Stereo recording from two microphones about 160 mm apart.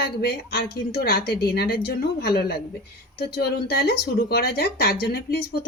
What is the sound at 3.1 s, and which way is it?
Speech, 90° left.